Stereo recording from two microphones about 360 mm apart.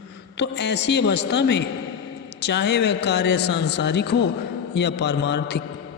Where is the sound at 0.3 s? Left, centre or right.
Left.